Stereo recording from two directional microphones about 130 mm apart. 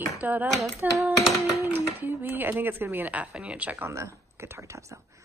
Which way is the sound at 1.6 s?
15° right (ahead or behind).